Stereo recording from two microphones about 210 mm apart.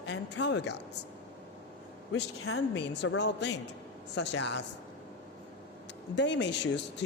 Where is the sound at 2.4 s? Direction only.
90° left.